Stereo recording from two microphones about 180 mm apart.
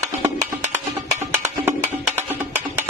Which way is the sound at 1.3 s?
15° right (ahead or behind).